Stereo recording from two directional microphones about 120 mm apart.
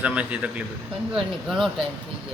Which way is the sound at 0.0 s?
10° right (ahead or behind).